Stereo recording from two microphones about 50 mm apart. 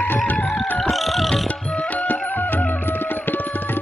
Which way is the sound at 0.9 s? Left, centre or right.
Centre.